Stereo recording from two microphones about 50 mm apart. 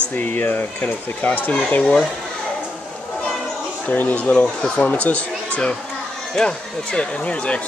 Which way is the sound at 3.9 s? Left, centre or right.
Left.